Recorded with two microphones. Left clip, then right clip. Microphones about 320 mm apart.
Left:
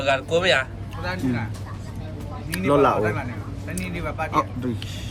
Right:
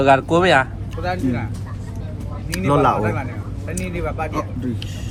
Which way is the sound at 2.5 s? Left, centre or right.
Centre.